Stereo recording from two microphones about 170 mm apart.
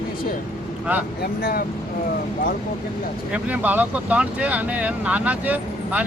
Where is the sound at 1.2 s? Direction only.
65° left (ahead or behind).